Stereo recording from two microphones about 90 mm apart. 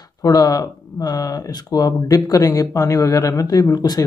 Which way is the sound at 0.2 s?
45° left (ahead or behind).